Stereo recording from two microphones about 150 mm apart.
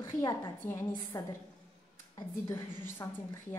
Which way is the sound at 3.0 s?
20° left (ahead or behind).